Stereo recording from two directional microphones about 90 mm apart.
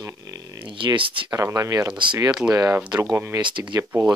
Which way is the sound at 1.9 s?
65° right (ahead or behind).